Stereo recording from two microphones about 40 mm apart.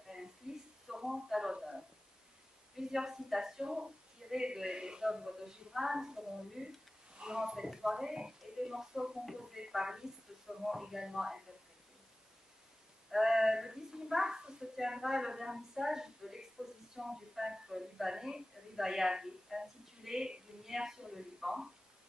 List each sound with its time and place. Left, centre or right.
0.4 s a sound: centre
2.9 s a woman's voice: centre
13.1 s a woman's voice: centre